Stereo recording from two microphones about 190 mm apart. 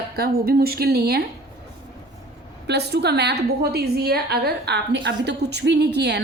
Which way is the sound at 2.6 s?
60° right (ahead or behind).